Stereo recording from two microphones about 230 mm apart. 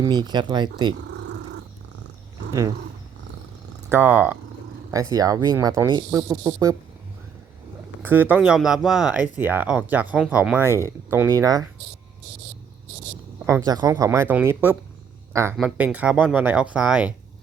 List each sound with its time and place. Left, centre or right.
0.0 s speech: centre
1.2 s purr: right
2.5 s speech: centre
3.8 s speech: centre
8.0 s speech: centre
13.7 s speech: centre